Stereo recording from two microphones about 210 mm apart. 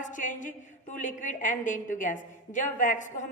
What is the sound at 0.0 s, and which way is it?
A woman's voice, 40° left (ahead or behind).